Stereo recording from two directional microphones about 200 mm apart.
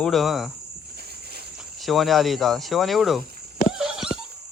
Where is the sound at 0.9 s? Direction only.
55° right (ahead or behind).